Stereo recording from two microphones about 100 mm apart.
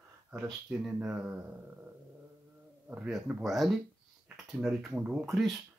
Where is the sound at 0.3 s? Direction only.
15° right (ahead or behind).